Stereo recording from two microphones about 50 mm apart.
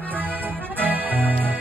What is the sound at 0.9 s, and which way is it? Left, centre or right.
Music, right.